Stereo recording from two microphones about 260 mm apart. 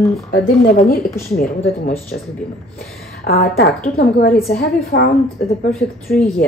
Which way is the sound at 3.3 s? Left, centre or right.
Left.